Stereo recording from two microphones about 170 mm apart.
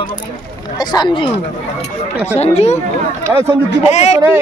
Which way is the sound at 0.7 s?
25° left (ahead or behind).